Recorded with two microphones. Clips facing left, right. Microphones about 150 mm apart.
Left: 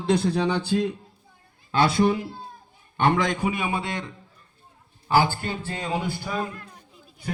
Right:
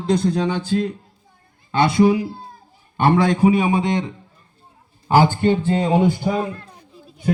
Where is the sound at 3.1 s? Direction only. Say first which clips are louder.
Right 9 dB; 35° right (ahead or behind).